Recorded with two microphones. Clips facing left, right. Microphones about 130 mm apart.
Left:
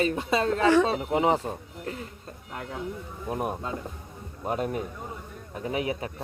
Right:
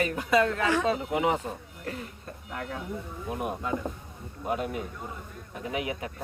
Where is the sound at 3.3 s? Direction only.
35° left (ahead or behind).